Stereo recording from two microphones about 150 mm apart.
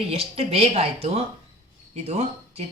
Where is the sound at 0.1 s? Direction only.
40° right (ahead or behind).